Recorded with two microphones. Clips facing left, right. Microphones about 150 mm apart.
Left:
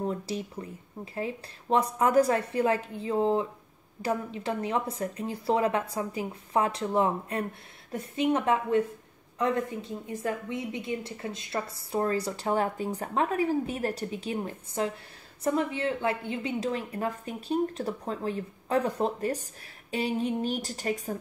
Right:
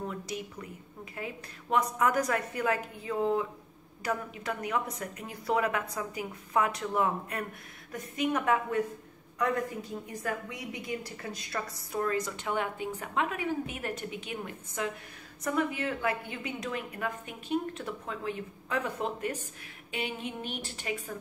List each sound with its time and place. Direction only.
0.0 s a woman's voice: 30° left (ahead or behind)